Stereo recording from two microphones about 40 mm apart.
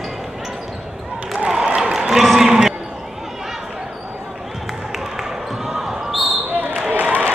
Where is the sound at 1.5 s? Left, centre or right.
Centre.